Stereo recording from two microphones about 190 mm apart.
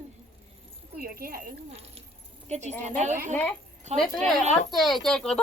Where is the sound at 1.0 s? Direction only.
50° right (ahead or behind).